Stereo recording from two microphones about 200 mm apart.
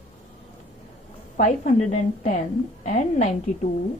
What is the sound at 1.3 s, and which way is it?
A woman's voice, 40° left (ahead or behind).